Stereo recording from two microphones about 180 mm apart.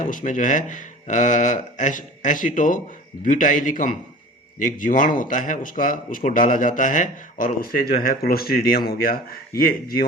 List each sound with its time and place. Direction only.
0.0 s speech: 45° left (ahead or behind)